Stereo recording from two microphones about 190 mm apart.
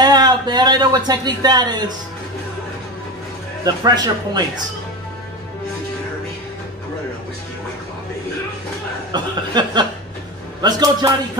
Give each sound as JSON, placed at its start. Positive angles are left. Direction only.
{"t": 0.0, "sound": "speech", "side_deg": -20}
{"t": 3.6, "sound": "speech", "side_deg": -20}
{"t": 9.1, "sound": "speech", "side_deg": -25}